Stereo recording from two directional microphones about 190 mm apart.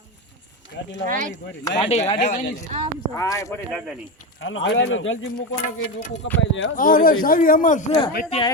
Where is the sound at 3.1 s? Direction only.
15° left (ahead or behind).